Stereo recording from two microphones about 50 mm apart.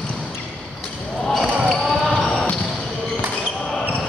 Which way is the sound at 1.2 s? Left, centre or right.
Centre.